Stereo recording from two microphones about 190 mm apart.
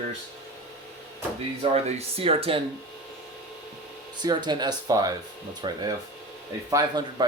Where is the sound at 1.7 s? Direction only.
35° right (ahead or behind).